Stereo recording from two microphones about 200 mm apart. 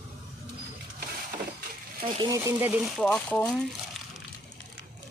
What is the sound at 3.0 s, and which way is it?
Speech, 5° left (ahead or behind).